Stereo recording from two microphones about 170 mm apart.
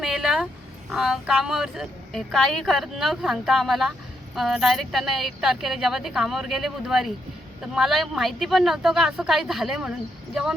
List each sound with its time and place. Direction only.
0.0 s speech: 5° right (ahead or behind)